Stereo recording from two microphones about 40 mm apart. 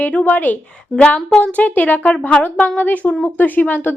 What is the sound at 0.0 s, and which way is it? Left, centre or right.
A woman's voice, left.